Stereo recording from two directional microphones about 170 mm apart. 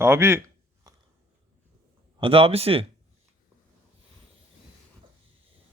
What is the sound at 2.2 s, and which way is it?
Speech, 35° right (ahead or behind).